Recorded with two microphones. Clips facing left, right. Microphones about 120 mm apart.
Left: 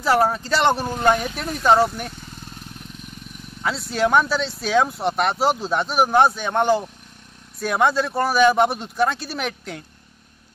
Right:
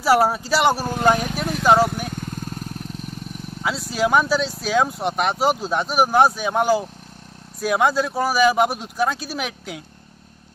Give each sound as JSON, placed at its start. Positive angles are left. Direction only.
{"t": 0.0, "sound": "speech", "side_deg": -10}
{"t": 2.1, "sound": "vehicle", "side_deg": -50}
{"t": 3.6, "sound": "speech", "side_deg": 0}